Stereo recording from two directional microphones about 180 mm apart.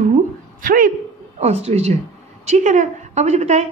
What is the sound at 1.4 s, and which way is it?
A woman's voice, 35° right (ahead or behind).